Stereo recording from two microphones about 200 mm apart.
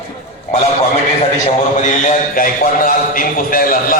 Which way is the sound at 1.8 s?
40° left (ahead or behind).